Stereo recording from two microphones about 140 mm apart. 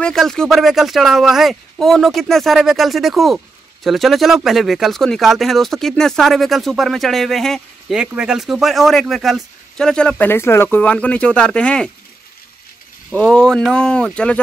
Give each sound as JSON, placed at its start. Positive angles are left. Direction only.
{"t": 0.0, "sound": "speech", "side_deg": 5}
{"t": 13.1, "sound": "speech", "side_deg": 5}